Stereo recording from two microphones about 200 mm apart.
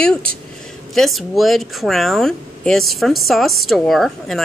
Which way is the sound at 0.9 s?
Centre (ahead or behind).